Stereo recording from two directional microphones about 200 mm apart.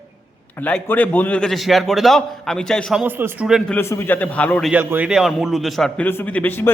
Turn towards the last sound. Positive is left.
turn(degrees=10)  # may be behind; listen again after turning